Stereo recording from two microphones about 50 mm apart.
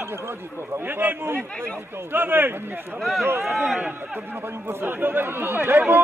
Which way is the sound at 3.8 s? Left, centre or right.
Right.